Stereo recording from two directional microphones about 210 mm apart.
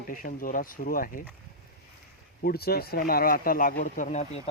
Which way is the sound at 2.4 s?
45° left (ahead or behind).